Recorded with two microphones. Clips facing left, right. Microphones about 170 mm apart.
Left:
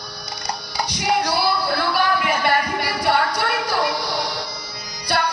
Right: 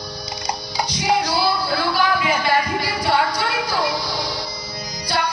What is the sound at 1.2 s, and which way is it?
Music, 60° left (ahead or behind).